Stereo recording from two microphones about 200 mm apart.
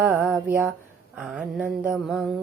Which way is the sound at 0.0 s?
10° right (ahead or behind).